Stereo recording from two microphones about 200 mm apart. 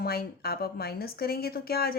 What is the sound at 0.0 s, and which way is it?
A woman's voice, 50° left (ahead or behind).